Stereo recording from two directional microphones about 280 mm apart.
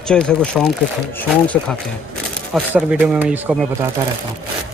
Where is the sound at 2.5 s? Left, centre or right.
Centre.